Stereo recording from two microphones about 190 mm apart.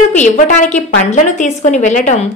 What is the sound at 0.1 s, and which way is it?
A woman's voice, 40° left (ahead or behind).